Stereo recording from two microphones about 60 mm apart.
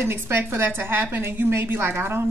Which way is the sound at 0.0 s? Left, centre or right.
Right.